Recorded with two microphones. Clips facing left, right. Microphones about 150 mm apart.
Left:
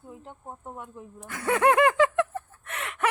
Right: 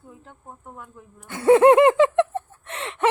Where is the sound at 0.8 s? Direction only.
25° left (ahead or behind).